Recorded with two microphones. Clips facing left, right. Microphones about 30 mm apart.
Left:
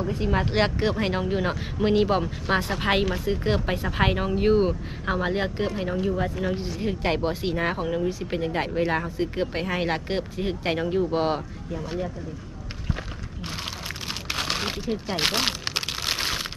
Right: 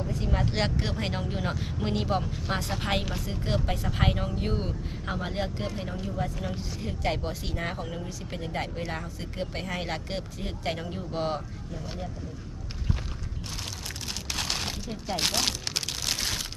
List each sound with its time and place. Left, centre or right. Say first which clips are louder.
0.0 s speech: left 5 dB; left
6.1 s speech: left 7 dB; left
13.8 s crumpling: left 4 dB; left